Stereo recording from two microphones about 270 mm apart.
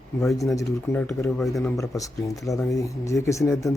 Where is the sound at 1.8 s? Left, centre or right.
Centre.